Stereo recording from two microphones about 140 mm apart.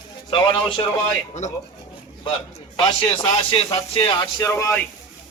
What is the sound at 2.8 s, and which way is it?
Speech, 35° left (ahead or behind).